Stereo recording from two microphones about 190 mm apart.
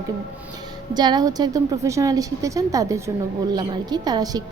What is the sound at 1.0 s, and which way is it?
A woman's voice, 20° right (ahead or behind).